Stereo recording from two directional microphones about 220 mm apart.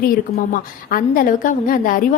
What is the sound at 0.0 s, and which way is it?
A woman's voice, 40° left (ahead or behind).